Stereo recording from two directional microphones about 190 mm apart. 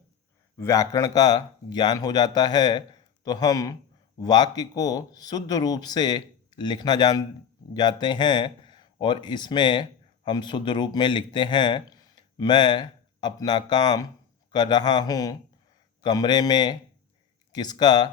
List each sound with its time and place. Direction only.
0.5 s speech: 15° left (ahead or behind)